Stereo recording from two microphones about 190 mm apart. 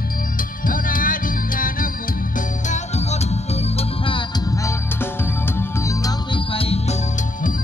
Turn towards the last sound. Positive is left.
turn(degrees=30)  # may be behind; listen again after turning